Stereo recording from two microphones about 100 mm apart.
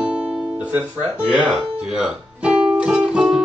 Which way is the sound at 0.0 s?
10° right (ahead or behind).